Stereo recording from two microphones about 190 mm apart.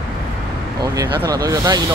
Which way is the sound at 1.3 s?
20° right (ahead or behind).